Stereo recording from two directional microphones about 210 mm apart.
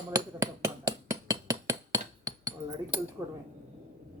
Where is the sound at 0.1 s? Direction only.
15° right (ahead or behind).